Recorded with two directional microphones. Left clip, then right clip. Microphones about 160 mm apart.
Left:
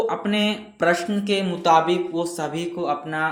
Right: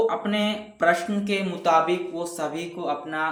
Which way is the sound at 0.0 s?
20° left (ahead or behind).